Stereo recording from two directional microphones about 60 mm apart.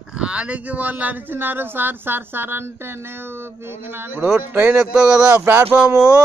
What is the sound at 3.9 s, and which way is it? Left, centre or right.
Speech, right.